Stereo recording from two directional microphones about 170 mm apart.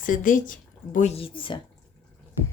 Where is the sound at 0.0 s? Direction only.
50° left (ahead or behind); by 1.5 s 30° left (ahead or behind).